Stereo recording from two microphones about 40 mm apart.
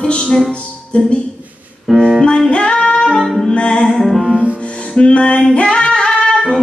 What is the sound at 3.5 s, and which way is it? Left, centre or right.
Music, left.